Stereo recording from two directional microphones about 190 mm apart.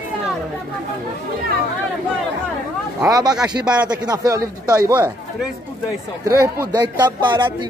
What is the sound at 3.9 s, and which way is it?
Speech, 20° right (ahead or behind).